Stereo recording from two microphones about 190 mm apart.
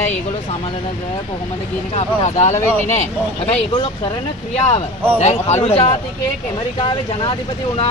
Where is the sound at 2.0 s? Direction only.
35° left (ahead or behind).